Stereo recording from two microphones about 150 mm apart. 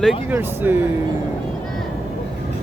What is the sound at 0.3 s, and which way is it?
Speech, 15° right (ahead or behind).